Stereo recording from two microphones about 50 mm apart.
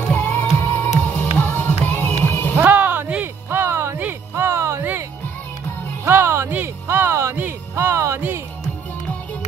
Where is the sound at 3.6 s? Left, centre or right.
Right.